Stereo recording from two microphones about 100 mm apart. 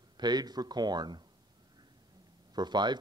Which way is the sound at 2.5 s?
45° right (ahead or behind).